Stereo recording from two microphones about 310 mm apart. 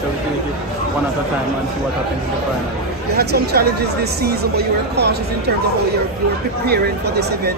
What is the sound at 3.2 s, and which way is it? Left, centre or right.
Speech, right.